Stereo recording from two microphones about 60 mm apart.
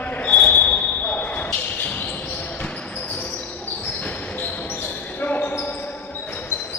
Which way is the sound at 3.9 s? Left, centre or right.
Left.